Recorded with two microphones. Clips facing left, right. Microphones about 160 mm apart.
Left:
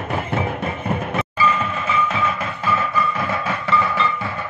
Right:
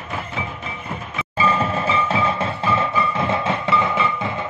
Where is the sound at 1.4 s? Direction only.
30° right (ahead or behind).